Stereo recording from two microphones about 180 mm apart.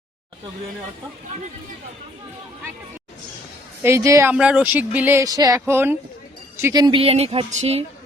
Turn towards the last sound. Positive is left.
turn(degrees=-35)  # may be behind; listen again after turning